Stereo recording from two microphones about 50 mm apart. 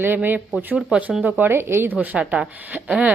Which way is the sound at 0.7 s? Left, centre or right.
Right.